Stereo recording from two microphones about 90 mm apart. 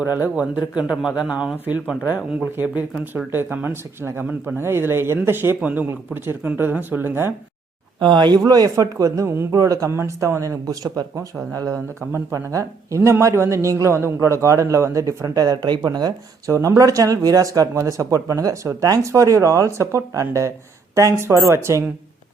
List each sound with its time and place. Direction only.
0.0 s speech: 20° right (ahead or behind)
0.7 s speech: 10° right (ahead or behind); by 7.3 s 25° right (ahead or behind)
7.9 s speech: 55° right (ahead or behind)
8.4 s speech: 45° right (ahead or behind)
16.5 s speech: 35° right (ahead or behind)